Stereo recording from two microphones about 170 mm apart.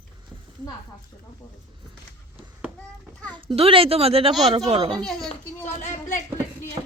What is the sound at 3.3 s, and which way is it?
A child's voice, 30° right (ahead or behind).